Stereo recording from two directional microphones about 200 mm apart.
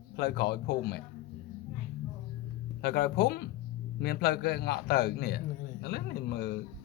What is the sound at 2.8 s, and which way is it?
Speech, 50° left (ahead or behind).